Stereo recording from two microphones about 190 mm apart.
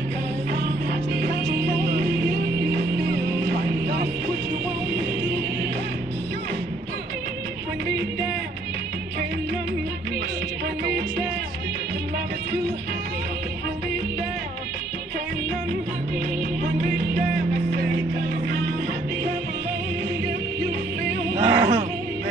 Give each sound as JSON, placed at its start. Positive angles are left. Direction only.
{"t": 1.9, "sound": "music", "side_deg": -55}
{"t": 10.9, "sound": "music", "side_deg": -60}
{"t": 16.9, "sound": "music", "side_deg": -55}
{"t": 21.4, "sound": "a sound", "side_deg": -25}